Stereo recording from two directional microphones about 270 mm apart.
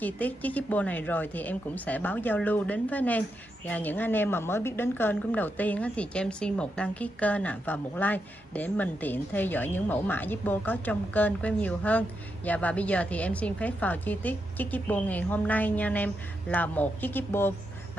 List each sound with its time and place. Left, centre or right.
0.0 s a woman's voice: centre